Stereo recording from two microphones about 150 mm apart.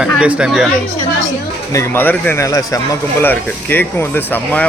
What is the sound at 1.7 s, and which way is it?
Speech, 15° left (ahead or behind).